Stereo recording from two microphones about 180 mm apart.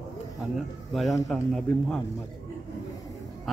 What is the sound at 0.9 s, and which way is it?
A man's voice, centre (ahead or behind).